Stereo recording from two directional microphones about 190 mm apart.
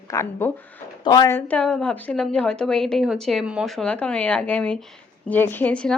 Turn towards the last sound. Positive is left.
turn(degrees=5)  # may be behind; listen again after turning